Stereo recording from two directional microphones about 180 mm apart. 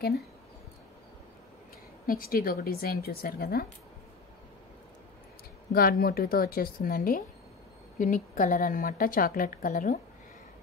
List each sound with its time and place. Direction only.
2.0 s a woman's voice: 55° left (ahead or behind)
5.7 s a woman's voice: 55° left (ahead or behind)